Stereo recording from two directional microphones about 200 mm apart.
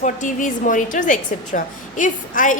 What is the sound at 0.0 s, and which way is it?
A woman's voice, 40° left (ahead or behind).